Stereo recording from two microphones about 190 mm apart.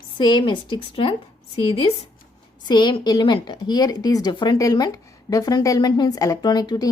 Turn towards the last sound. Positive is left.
turn(degrees=20)  # may be behind; listen again after turning